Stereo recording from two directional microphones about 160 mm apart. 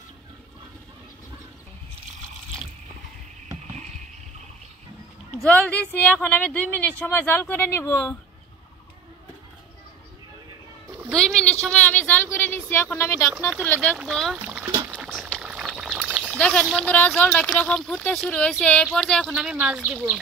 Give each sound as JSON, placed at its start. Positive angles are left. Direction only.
{"t": 5.4, "sound": "speech", "side_deg": 10}
{"t": 11.1, "sound": "a sound", "side_deg": 5}
{"t": 13.7, "sound": "speech", "side_deg": 5}
{"t": 15.0, "sound": "pour", "side_deg": 0}
{"t": 16.8, "sound": "speech", "side_deg": 10}
{"t": 19.2, "sound": "speech", "side_deg": -5}